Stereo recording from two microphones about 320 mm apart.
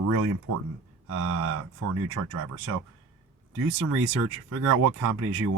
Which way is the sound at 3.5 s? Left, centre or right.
Right.